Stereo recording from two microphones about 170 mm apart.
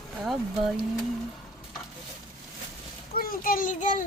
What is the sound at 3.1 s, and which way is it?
Speech, 60° left (ahead or behind).